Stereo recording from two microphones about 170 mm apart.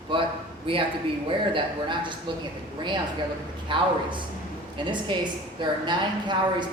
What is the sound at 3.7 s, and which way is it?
Speech, 30° right (ahead or behind).